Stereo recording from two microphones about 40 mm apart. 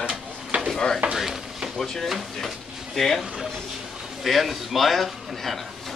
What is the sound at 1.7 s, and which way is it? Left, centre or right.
Speech, centre.